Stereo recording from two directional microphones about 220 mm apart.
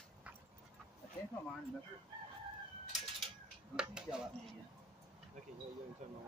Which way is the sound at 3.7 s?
5° right (ahead or behind).